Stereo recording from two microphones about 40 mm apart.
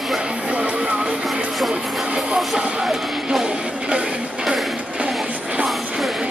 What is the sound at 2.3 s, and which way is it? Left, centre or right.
Music, centre.